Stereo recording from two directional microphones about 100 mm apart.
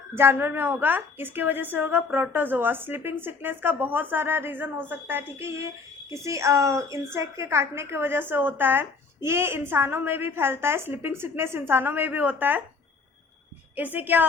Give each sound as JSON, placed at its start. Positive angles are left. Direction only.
{"t": 0.1, "sound": "a woman's voice", "side_deg": -20}
{"t": 13.7, "sound": "a woman's voice", "side_deg": -20}